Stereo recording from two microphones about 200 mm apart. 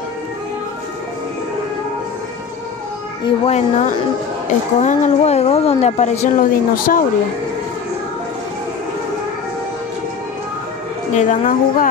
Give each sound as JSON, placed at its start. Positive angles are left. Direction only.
{"t": 3.3, "sound": "a woman's voice", "side_deg": 30}
{"t": 11.1, "sound": "a woman's voice", "side_deg": 40}